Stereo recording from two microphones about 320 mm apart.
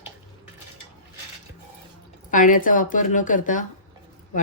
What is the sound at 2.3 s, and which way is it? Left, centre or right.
Speech, left.